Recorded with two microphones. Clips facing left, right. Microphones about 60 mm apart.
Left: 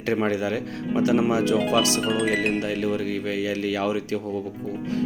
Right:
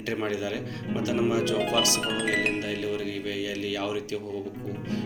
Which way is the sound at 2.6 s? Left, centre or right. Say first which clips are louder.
Left 5 dB; left.